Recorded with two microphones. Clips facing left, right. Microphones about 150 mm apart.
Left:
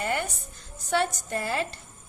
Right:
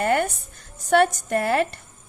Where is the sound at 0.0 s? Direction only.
55° right (ahead or behind).